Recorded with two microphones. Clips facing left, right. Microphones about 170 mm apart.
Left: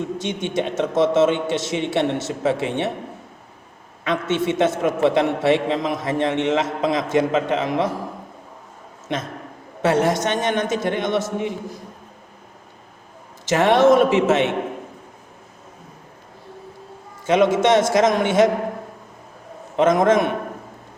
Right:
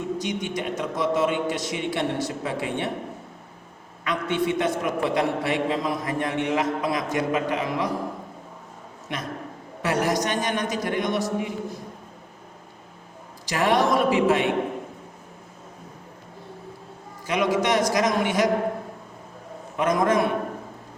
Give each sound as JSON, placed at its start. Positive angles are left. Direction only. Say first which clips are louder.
{"t": 0.2, "sound": "a man's voice", "louder": "left 4 dB", "side_deg": 25}
{"t": 4.0, "sound": "a man's voice", "louder": "left 3 dB", "side_deg": 25}
{"t": 9.8, "sound": "a man's voice", "louder": "left 5 dB", "side_deg": 25}
{"t": 13.4, "sound": "a man's voice", "louder": "left 6 dB", "side_deg": 25}
{"t": 17.2, "sound": "a man's voice", "louder": "left 7 dB", "side_deg": 25}
{"t": 19.7, "sound": "a man's voice", "louder": "left 5 dB", "side_deg": 25}